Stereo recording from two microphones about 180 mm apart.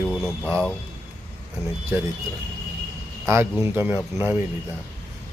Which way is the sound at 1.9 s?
15° right (ahead or behind).